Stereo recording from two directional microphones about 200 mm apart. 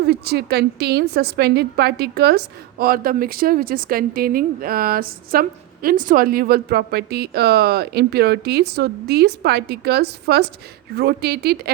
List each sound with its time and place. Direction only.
0.0 s a woman's voice: 55° right (ahead or behind)